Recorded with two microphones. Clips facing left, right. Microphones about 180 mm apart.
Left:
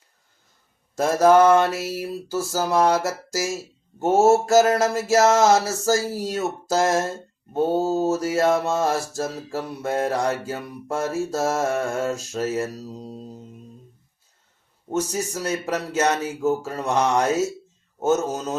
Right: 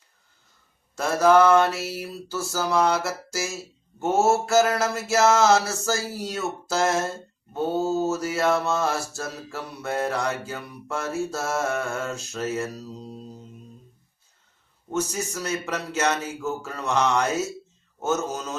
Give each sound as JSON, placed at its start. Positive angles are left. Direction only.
{"t": 0.9, "sound": "mantra", "side_deg": 45}
{"t": 14.8, "sound": "mantra", "side_deg": 35}